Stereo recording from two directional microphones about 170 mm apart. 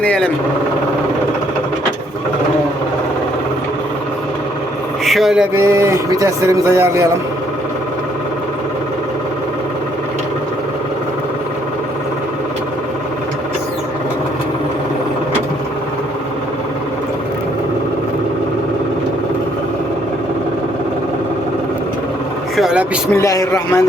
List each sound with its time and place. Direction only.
0.0 s speech: 5° left (ahead or behind)
5.0 s vehicle: centre (ahead or behind)
5.5 s a man's voice: 15° right (ahead or behind)
22.5 s vehicle: 5° right (ahead or behind)
23.1 s a man's voice: 20° left (ahead or behind)